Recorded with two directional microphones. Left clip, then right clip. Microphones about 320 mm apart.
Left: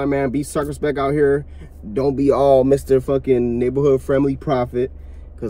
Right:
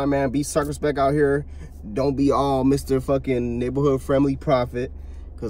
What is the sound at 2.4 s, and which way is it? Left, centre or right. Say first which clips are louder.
Speech: left 7 dB; centre.